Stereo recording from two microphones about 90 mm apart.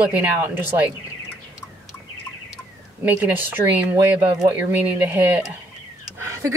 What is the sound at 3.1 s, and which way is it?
Speech, 20° right (ahead or behind).